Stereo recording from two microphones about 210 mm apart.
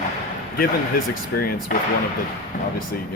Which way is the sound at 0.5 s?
45° left (ahead or behind).